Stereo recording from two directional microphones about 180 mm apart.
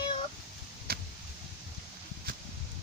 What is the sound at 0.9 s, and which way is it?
Vehicle, 55° right (ahead or behind).